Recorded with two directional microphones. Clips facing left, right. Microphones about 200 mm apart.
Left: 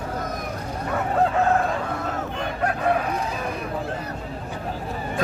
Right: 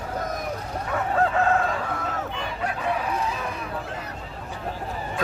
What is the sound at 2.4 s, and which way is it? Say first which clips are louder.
Crowing: left 4 dB; 55° left (ahead or behind).